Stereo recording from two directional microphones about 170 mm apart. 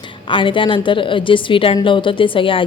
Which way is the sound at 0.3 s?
30° left (ahead or behind).